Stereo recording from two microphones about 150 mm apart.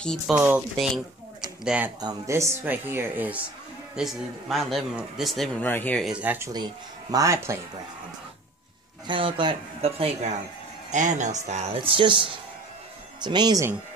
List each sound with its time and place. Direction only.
0.3 s speech: 5° right (ahead or behind)
2.0 s speech: 25° right (ahead or behind)
3.9 s speech: centre (ahead or behind)
6.0 s speech: 10° right (ahead or behind)
6.5 s speech: 25° right (ahead or behind)
9.0 s speech: 35° right (ahead or behind)
10.9 s speech: 55° right (ahead or behind); by 13.7 s 30° right (ahead or behind)